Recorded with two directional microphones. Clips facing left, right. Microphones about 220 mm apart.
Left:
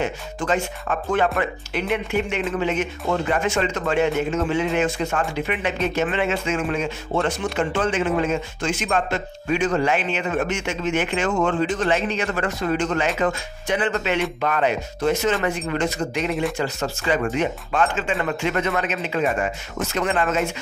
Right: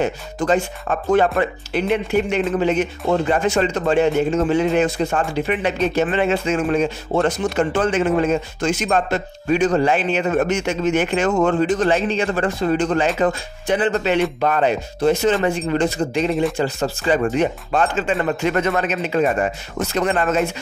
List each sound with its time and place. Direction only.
0.0 s speech: 35° right (ahead or behind)